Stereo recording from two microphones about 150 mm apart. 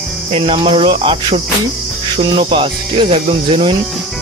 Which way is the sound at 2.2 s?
35° right (ahead or behind).